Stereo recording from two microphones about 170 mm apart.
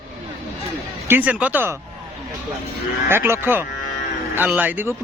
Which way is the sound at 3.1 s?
15° right (ahead or behind).